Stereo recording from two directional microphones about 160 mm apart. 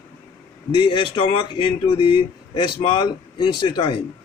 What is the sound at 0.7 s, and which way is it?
Speech, 30° left (ahead or behind).